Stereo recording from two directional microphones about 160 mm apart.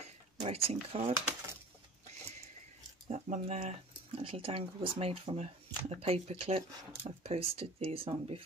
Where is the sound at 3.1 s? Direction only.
45° right (ahead or behind).